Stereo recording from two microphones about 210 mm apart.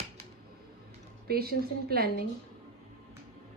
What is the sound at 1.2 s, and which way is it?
A woman's voice, 45° right (ahead or behind).